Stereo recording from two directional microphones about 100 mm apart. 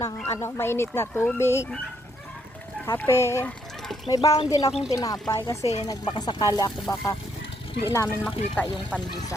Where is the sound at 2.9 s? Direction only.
25° left (ahead or behind).